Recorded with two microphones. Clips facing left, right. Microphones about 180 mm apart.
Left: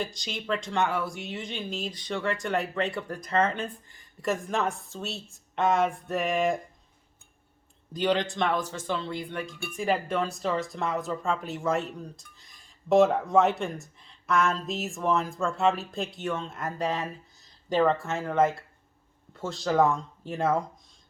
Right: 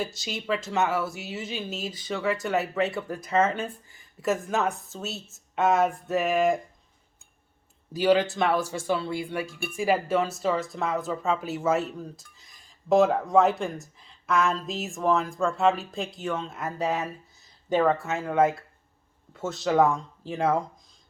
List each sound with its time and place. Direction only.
0.0 s speech: 5° right (ahead or behind)
7.9 s speech: 5° right (ahead or behind)